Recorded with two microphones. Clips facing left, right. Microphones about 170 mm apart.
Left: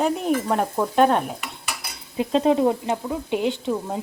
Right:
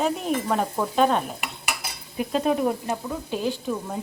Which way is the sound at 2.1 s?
25° left (ahead or behind).